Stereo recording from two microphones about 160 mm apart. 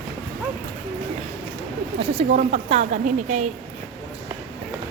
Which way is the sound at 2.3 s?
45° right (ahead or behind).